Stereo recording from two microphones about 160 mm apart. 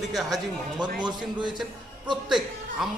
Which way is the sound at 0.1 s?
Centre (ahead or behind).